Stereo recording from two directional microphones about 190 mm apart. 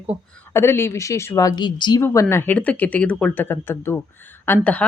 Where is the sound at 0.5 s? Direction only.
10° left (ahead or behind).